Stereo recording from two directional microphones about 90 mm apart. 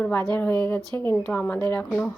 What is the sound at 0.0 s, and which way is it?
Speech, 20° left (ahead or behind).